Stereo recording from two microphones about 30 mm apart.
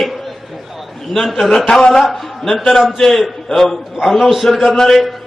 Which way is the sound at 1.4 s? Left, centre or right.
Centre.